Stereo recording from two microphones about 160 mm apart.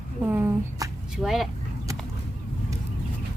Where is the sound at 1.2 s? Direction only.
Centre (ahead or behind).